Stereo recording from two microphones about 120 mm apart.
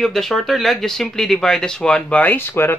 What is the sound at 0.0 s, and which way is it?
Speech, centre (ahead or behind).